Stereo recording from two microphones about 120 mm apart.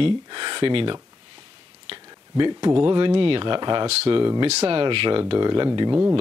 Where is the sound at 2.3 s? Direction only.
35° right (ahead or behind).